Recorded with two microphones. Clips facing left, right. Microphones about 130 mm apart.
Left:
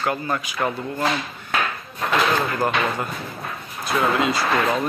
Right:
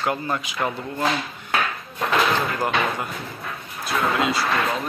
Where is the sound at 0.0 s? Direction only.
20° right (ahead or behind).